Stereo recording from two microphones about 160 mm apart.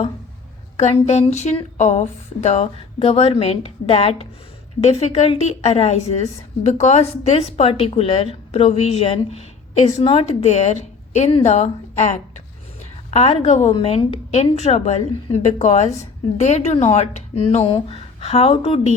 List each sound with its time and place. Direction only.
0.8 s a woman's voice: 45° left (ahead or behind)